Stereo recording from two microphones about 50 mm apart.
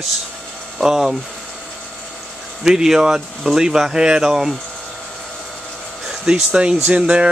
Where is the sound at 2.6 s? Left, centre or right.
Centre.